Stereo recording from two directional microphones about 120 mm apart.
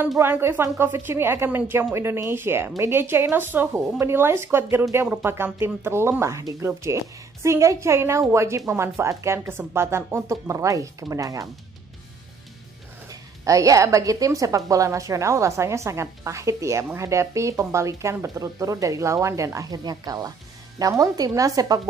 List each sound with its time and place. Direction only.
0.2 s a woman's voice: 20° right (ahead or behind)
13.1 s a woman's voice: 25° right (ahead or behind)